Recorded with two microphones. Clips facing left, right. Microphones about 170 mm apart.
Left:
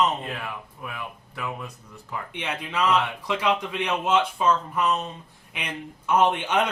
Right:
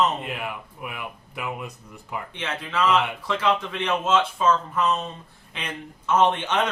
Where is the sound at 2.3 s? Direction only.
15° left (ahead or behind).